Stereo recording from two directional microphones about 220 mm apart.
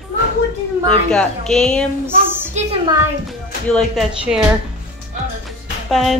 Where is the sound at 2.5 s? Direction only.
30° right (ahead or behind).